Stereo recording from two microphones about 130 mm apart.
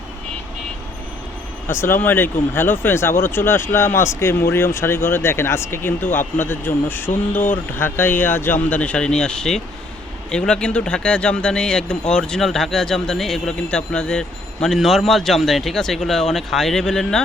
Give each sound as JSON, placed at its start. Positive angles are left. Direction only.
{"t": 1.6, "sound": "speech", "side_deg": 20}